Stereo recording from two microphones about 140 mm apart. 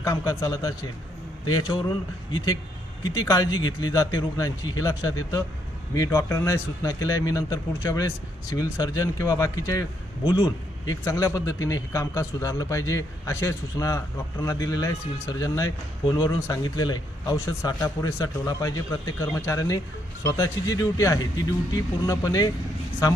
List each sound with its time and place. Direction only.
0.0 s a man's voice: 20° left (ahead or behind)